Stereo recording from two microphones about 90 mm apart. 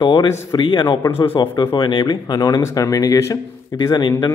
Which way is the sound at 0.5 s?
55° left (ahead or behind).